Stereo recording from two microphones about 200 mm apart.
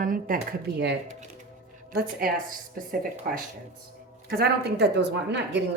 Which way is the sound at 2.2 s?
50° right (ahead or behind).